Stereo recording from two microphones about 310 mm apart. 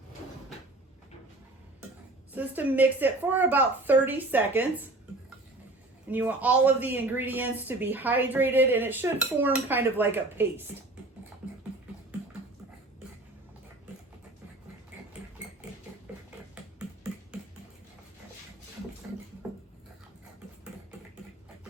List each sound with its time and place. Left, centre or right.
2.3 s speech: centre
6.1 s speech: centre
16.6 s a sound: centre